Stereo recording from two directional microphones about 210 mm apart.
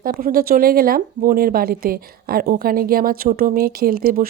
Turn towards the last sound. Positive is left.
turn(degrees=-45)  # may be behind; listen again after turning